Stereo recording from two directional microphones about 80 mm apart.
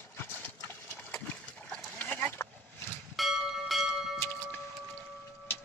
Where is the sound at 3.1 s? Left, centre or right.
Centre.